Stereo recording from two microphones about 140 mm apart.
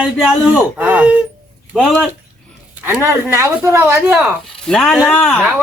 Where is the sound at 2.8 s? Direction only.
15° right (ahead or behind).